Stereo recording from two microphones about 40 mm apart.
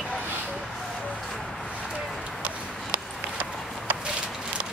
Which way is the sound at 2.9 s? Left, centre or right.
Right.